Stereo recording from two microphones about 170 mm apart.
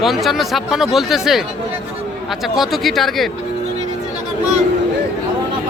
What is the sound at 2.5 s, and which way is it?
Speech, centre (ahead or behind).